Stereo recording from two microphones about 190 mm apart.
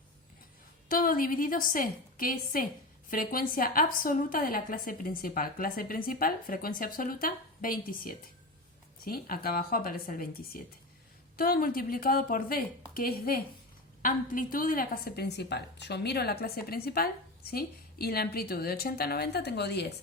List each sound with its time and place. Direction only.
0.9 s a woman's voice: 45° left (ahead or behind)